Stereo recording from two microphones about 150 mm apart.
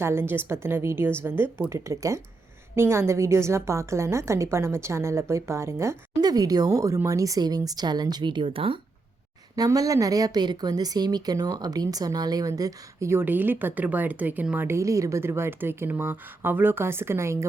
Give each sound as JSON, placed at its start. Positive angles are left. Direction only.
{"t": 0.0, "sound": "a woman's voice", "side_deg": -15}
{"t": 9.6, "sound": "speech", "side_deg": -25}